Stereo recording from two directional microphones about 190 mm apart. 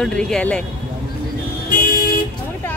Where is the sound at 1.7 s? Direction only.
50° left (ahead or behind).